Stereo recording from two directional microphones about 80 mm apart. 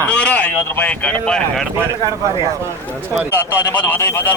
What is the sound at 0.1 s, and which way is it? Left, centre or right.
Speech, centre.